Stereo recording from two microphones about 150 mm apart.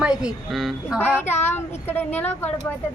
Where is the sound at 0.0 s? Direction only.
5° right (ahead or behind).